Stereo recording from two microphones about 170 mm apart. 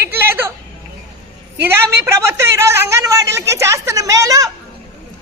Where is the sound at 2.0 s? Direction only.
15° right (ahead or behind).